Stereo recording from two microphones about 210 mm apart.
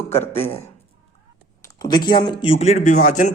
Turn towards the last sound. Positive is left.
turn(degrees=35)  # may be behind; listen again after turning